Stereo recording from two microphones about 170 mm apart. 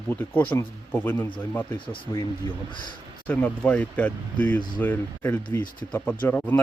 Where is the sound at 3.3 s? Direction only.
10° left (ahead or behind).